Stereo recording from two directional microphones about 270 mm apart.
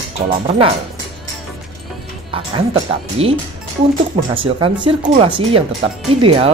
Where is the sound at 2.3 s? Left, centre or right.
Centre.